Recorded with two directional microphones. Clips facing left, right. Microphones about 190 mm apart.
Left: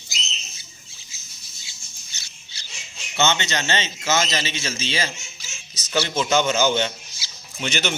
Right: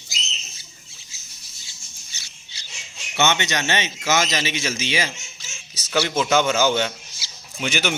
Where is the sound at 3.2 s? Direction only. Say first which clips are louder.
Right 1 dB; 15° right (ahead or behind).